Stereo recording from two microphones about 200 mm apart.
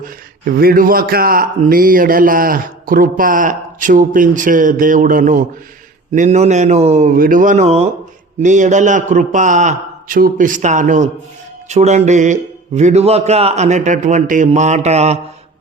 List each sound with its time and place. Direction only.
0.0 s a man's voice: 50° right (ahead or behind); by 15.2 s 35° right (ahead or behind)